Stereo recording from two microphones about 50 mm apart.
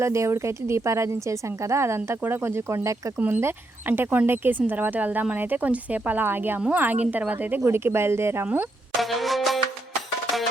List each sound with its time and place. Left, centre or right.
0.0 s speech: right
2.2 s speech: right
3.2 s speech: right
6.2 s speech: right
6.6 s speech: right
7.9 s speech: right
9.0 s music: centre